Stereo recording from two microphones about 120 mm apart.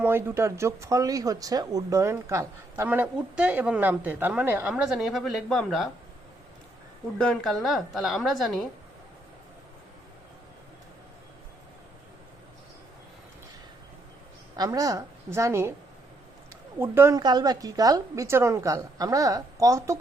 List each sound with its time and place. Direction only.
0.0 s speech: 20° right (ahead or behind)
4.7 s a woman's voice: 5° right (ahead or behind)
7.2 s a woman's voice: 5° left (ahead or behind)
14.5 s a woman's voice: 30° right (ahead or behind)
16.7 s speech: 20° right (ahead or behind)
17.2 s speech: 35° right (ahead or behind)